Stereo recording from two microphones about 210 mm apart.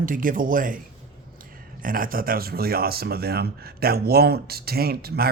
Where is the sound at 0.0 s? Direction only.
40° right (ahead or behind).